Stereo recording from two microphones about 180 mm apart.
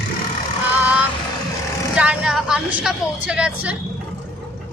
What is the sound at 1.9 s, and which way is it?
A woman's voice, 5° right (ahead or behind).